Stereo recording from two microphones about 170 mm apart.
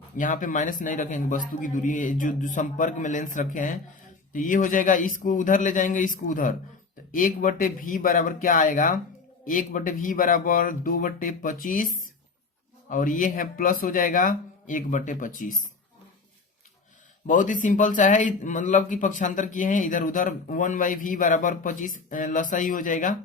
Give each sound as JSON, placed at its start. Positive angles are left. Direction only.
{"t": 0.2, "sound": "speech", "side_deg": 50}
{"t": 17.2, "sound": "speech", "side_deg": 50}